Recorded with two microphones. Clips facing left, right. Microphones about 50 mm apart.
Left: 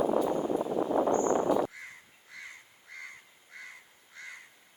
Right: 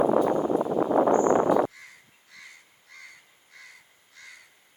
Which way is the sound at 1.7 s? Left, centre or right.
Left.